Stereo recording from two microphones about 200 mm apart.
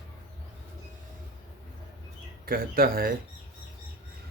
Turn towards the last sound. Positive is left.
turn(degrees=-50)  # may be behind; listen again after turning